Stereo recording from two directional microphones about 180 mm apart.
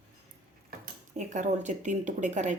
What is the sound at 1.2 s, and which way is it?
Speech, 40° right (ahead or behind).